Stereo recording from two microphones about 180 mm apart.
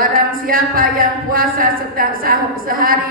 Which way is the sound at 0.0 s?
50° right (ahead or behind).